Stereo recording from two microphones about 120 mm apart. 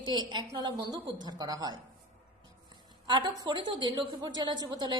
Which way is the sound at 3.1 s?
40° right (ahead or behind).